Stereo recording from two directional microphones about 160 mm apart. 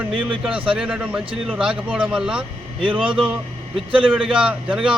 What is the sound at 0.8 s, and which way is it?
Speech, 5° right (ahead or behind).